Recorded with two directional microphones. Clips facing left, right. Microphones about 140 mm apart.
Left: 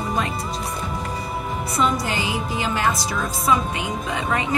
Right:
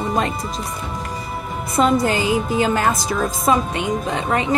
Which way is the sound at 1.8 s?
45° right (ahead or behind).